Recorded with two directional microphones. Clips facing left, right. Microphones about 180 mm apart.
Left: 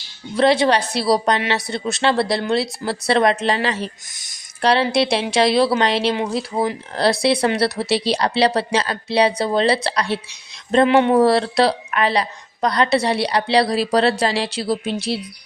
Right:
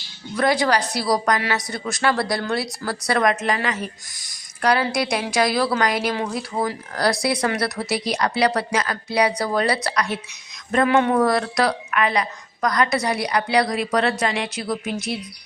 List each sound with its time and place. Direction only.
0.3 s a woman's voice: 25° left (ahead or behind)